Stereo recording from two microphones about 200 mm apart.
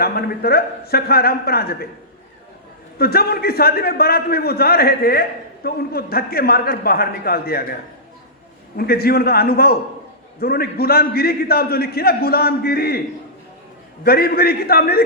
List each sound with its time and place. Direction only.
0.0 s a man's voice: 50° left (ahead or behind)
3.0 s a man's voice: 50° left (ahead or behind)
14.0 s a man's voice: 50° left (ahead or behind)